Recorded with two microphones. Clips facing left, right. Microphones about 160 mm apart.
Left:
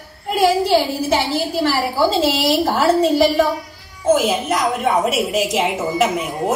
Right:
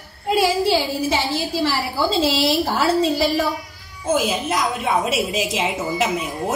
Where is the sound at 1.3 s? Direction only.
45° left (ahead or behind).